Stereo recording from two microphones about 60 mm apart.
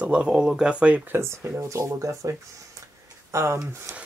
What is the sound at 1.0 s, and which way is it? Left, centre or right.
Speech, right.